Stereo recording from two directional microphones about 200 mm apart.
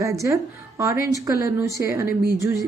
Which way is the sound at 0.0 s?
15° right (ahead or behind).